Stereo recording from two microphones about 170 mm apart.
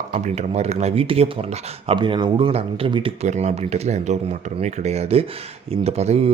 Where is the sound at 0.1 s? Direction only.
40° right (ahead or behind).